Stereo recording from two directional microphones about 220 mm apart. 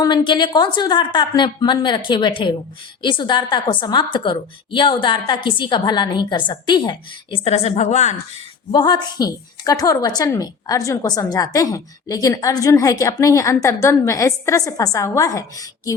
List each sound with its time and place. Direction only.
0.0 s a woman's voice: 20° left (ahead or behind)
8.7 s a woman's voice: 20° left (ahead or behind)